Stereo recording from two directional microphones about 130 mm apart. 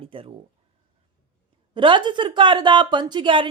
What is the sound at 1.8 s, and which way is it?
Speech, 40° right (ahead or behind).